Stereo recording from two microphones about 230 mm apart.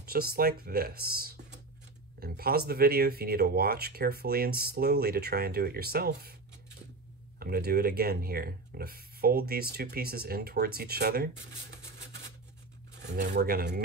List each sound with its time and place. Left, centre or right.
0.0 s speech: right
7.3 s speech: right
13.1 s speech: right